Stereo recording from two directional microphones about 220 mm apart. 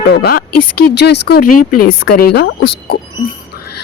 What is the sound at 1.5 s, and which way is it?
Speech, 90° left.